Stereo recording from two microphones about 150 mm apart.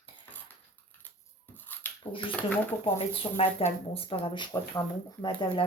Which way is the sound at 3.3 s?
40° left (ahead or behind).